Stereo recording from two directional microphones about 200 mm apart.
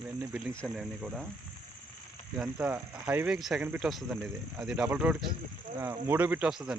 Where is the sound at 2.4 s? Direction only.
5° right (ahead or behind).